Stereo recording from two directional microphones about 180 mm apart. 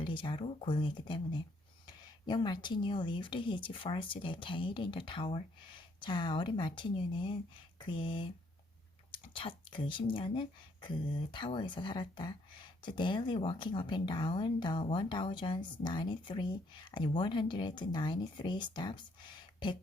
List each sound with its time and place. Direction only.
0.0 s speech: 25° left (ahead or behind)